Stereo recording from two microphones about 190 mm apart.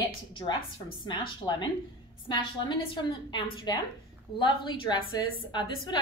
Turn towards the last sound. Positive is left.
turn(degrees=25)  # may be behind; listen again after turning